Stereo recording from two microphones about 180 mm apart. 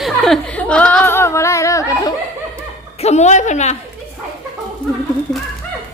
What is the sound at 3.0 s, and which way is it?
Speech, 40° left (ahead or behind).